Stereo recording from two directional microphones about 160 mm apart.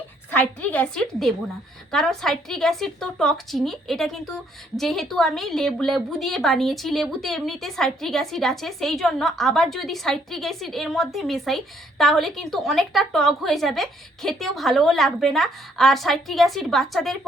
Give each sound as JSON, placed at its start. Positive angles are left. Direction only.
{"t": 0.3, "sound": "a woman's voice", "side_deg": 10}